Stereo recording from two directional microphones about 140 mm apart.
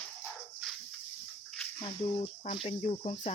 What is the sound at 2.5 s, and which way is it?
Speech, 40° left (ahead or behind).